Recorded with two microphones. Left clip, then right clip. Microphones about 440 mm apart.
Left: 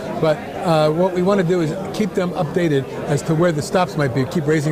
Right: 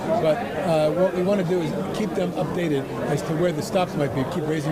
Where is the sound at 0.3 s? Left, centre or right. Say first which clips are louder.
Left 3 dB; left.